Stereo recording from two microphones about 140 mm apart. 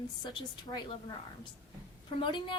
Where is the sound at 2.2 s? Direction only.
35° left (ahead or behind).